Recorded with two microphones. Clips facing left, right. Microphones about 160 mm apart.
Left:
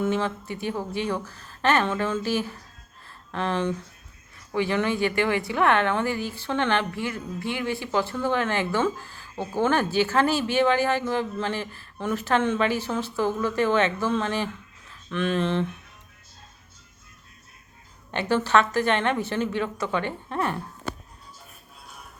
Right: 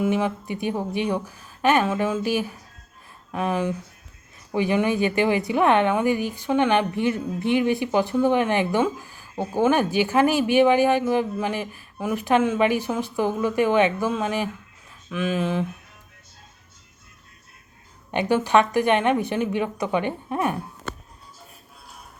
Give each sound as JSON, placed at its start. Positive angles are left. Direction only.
{"t": 0.0, "sound": "a woman's voice", "side_deg": -15}
{"t": 18.1, "sound": "a woman's voice", "side_deg": -15}